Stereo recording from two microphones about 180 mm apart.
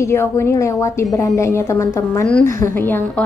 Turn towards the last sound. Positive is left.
turn(degrees=10)  # may be behind; listen again after turning